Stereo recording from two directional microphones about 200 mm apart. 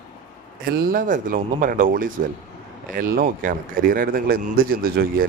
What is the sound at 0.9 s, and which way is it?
A man's voice, 40° right (ahead or behind).